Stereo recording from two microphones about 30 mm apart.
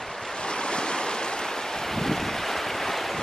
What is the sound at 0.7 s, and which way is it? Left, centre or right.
Waves, left.